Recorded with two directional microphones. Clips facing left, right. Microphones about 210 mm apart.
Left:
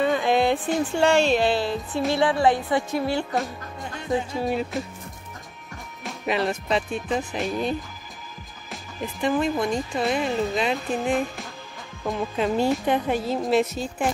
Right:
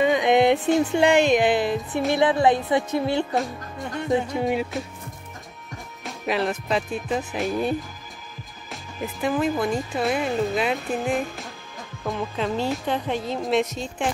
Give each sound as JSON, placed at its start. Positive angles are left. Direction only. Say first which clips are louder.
{"t": 0.0, "sound": "music", "louder": "right 3 dB", "side_deg": -15}
{"t": 0.7, "sound": "speech", "louder": "right 2 dB", "side_deg": -15}
{"t": 2.0, "sound": "music", "louder": "right 1 dB", "side_deg": -20}
{"t": 4.1, "sound": "speech", "louder": "right 2 dB", "side_deg": -15}
{"t": 6.0, "sound": "speech", "louder": "even", "side_deg": 0}